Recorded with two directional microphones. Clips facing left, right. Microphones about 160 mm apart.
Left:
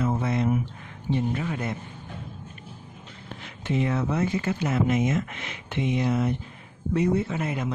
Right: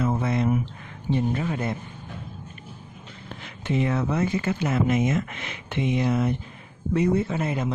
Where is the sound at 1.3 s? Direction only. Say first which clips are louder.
Right 2 dB; 35° right (ahead or behind).